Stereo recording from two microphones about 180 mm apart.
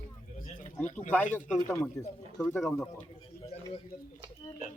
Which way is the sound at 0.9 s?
40° left (ahead or behind).